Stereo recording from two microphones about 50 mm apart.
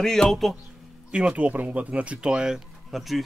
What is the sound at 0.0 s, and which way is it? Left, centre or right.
Speech, centre.